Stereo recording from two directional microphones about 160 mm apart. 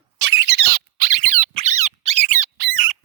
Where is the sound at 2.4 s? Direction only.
60° right (ahead or behind).